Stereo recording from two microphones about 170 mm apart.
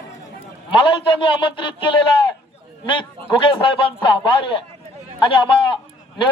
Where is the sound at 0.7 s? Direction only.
30° left (ahead or behind).